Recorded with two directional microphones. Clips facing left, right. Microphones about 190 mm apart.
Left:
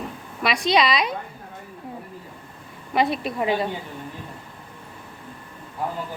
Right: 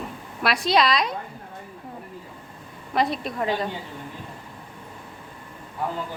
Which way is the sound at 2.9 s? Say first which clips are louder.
Left 2 dB; 5° left (ahead or behind).